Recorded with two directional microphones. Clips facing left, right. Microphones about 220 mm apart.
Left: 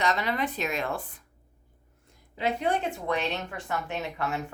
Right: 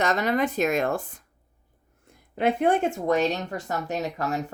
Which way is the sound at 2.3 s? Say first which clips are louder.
Right 6 dB; 55° right (ahead or behind).